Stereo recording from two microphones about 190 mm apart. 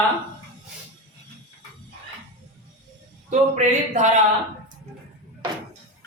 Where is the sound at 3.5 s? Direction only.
40° right (ahead or behind).